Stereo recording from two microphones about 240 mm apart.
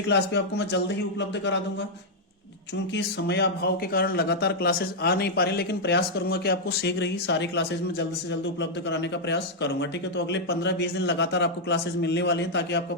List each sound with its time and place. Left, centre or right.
0.1 s speech: left
2.9 s speech: left